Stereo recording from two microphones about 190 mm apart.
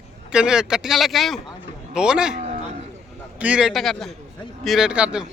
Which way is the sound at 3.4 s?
5° right (ahead or behind).